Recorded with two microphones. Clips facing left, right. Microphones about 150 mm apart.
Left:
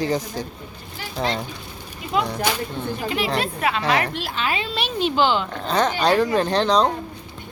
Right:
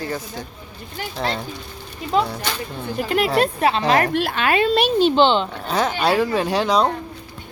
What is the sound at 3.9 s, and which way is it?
A woman's voice, 50° right (ahead or behind).